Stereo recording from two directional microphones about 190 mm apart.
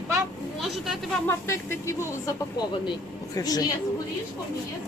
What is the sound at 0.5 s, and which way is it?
Vehicle, centre (ahead or behind).